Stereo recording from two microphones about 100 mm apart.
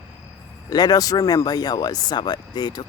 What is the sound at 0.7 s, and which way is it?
Speech, 40° left (ahead or behind).